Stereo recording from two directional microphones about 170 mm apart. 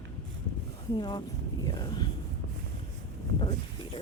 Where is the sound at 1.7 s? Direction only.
25° left (ahead or behind).